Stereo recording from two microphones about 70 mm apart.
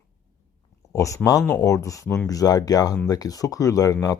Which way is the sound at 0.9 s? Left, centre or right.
Left.